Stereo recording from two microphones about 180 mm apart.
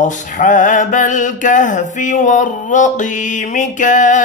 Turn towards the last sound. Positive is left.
turn(degrees=45)  # may be behind; listen again after turning